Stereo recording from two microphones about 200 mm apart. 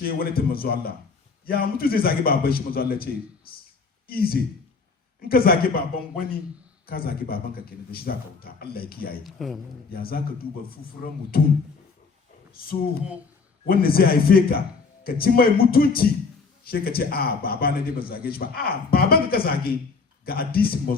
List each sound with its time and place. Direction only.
0.0 s a man's voice: 50° left (ahead or behind)
9.2 s a man's voice: centre (ahead or behind)
9.9 s a man's voice: 50° left (ahead or behind)
13.7 s a man's voice: 50° left (ahead or behind)